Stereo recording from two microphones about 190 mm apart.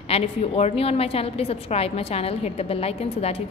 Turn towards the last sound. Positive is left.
turn(degrees=30)  # may be behind; listen again after turning